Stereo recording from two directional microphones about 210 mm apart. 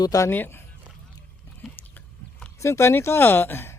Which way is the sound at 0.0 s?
15° left (ahead or behind).